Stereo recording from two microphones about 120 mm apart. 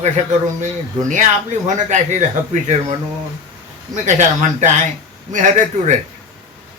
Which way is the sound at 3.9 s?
80° right.